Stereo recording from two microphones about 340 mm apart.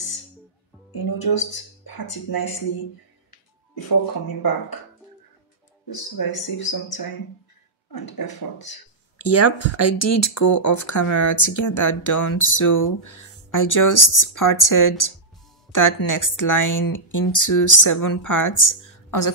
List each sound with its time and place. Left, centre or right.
0.9 s speech: left
5.9 s speech: left
9.2 s speech: left